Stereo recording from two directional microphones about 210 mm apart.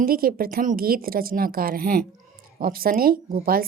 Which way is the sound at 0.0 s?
45° right (ahead or behind).